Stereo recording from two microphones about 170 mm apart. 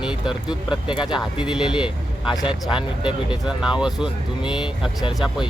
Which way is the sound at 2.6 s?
30° left (ahead or behind).